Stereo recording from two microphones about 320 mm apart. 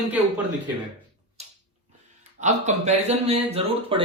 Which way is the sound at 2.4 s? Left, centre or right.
Right.